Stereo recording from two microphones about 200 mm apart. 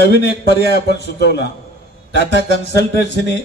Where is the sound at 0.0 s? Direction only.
55° left (ahead or behind).